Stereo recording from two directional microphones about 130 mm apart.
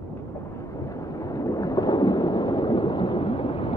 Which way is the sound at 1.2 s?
25° left (ahead or behind).